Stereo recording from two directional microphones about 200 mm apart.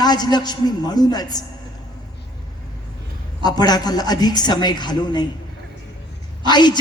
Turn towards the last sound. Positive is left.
turn(degrees=20)  # may be behind; listen again after turning